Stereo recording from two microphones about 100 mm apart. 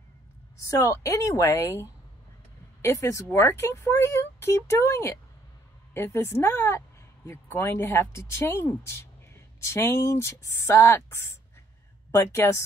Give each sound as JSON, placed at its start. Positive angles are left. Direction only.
{"t": 0.7, "sound": "speech", "side_deg": 30}